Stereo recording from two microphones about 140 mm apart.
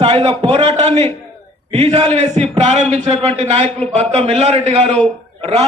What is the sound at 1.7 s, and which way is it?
A man's voice, 45° right (ahead or behind).